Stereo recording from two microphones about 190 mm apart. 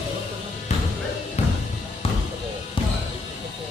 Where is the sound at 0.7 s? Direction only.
35° left (ahead or behind).